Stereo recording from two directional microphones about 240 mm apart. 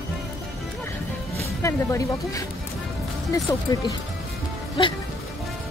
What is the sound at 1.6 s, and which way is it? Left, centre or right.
A woman's voice, centre.